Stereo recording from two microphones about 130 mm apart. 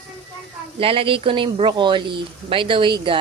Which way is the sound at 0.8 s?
45° right (ahead or behind).